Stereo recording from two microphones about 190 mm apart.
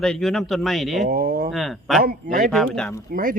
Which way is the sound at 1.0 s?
50° right (ahead or behind).